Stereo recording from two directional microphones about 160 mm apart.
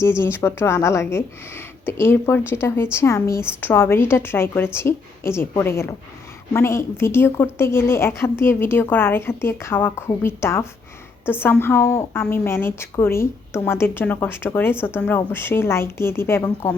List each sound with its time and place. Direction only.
0.0 s a woman's voice: 15° left (ahead or behind)